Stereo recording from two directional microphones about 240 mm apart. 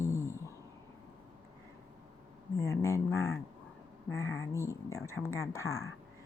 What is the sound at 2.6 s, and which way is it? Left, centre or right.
Speech, centre.